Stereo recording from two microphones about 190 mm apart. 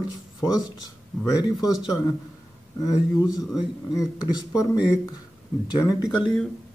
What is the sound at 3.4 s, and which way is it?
Speech, centre (ahead or behind).